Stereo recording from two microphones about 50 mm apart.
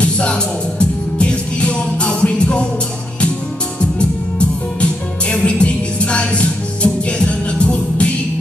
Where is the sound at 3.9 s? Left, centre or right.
Left.